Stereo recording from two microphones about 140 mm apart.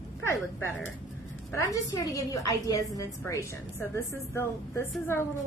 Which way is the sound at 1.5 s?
25° left (ahead or behind).